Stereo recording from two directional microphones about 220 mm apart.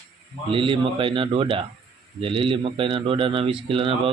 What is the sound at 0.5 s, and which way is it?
Speech, 25° right (ahead or behind).